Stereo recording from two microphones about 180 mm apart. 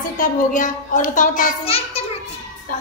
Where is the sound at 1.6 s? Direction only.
35° left (ahead or behind).